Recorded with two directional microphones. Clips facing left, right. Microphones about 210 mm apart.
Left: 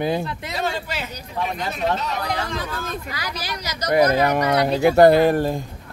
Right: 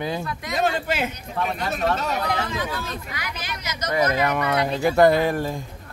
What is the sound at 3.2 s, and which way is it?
Speech, 35° left (ahead or behind).